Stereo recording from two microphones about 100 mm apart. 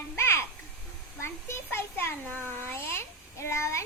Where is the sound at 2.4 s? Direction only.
20° left (ahead or behind).